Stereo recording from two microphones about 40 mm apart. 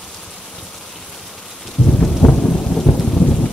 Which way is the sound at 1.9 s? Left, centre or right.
Left.